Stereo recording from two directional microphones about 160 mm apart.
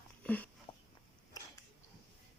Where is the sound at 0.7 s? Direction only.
35° left (ahead or behind).